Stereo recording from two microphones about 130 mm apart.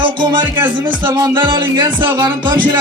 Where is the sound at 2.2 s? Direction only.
35° right (ahead or behind).